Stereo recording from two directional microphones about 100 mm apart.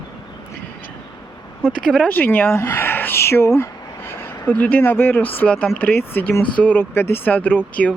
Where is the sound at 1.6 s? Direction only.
10° left (ahead or behind).